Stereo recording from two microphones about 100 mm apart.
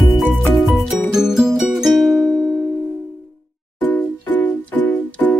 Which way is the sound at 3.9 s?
20° left (ahead or behind).